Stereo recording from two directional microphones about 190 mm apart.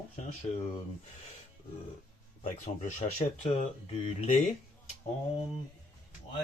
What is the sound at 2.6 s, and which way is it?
Speech, 40° left (ahead or behind).